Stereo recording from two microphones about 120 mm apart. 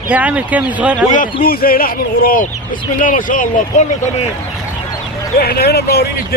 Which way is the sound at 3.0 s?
90° left.